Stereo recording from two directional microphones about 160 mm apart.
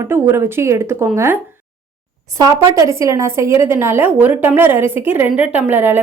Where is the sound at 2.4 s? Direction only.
20° right (ahead or behind).